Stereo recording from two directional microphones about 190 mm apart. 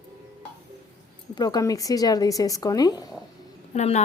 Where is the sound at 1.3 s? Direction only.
20° left (ahead or behind).